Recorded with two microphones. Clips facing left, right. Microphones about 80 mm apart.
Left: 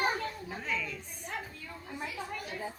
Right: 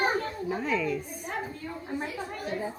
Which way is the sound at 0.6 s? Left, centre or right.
Centre.